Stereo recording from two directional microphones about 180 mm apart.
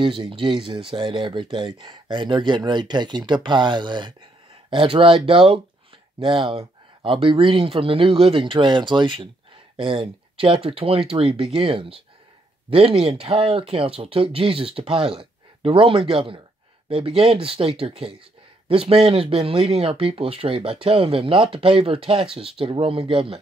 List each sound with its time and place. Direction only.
0.0 s speech: 30° right (ahead or behind)